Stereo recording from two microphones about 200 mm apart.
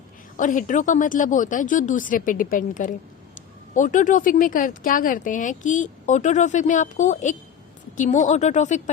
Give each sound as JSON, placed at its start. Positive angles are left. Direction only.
{"t": 0.3, "sound": "speech", "side_deg": 40}